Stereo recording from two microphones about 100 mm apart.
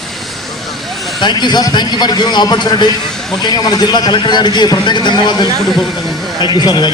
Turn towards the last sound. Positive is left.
turn(degrees=45)  # may be behind; listen again after turning